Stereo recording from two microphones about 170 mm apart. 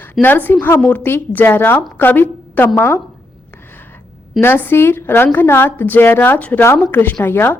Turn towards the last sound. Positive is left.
turn(degrees=15)  # may be behind; listen again after turning